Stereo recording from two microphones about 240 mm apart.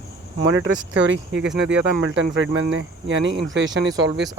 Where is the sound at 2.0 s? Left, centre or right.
Right.